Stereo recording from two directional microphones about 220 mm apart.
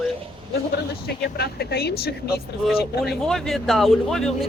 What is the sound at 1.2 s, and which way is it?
A woman's voice, 45° left (ahead or behind).